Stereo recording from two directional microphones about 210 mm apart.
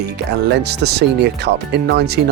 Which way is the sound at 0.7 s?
50° right (ahead or behind).